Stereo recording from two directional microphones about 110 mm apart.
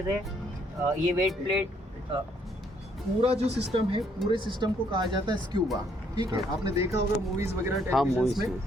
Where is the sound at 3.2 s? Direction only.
75° right (ahead or behind).